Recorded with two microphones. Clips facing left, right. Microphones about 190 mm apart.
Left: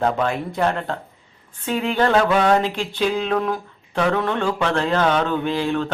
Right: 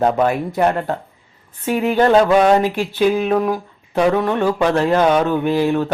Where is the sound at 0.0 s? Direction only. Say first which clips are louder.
Right 5 dB; 15° right (ahead or behind).